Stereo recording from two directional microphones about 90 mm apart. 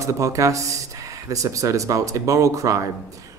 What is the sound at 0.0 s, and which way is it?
Speech, 35° right (ahead or behind).